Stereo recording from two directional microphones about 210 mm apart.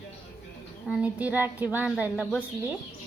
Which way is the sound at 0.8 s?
5° right (ahead or behind).